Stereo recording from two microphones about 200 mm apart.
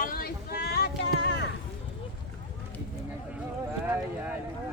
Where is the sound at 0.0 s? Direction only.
45° left (ahead or behind).